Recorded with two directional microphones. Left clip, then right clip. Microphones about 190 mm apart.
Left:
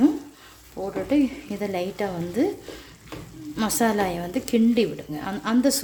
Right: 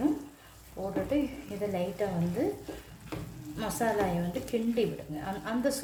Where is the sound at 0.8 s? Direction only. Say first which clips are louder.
Left 6 dB; 90° left.